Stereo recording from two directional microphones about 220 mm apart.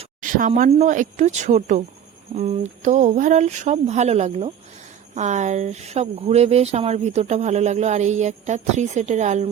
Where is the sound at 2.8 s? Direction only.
35° right (ahead or behind).